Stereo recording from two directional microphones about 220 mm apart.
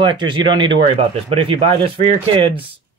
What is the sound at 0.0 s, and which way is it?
Speech, 20° right (ahead or behind).